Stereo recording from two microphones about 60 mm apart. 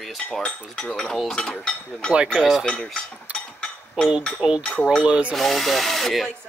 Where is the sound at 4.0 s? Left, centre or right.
Centre.